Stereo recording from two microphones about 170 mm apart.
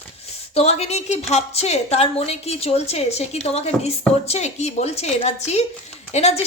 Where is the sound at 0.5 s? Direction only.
35° left (ahead or behind).